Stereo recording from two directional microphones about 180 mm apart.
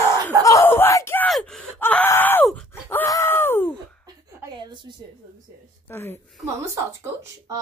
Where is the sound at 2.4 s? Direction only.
Centre (ahead or behind).